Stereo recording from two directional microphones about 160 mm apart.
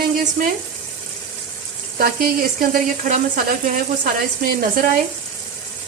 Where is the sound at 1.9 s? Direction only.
65° right (ahead or behind).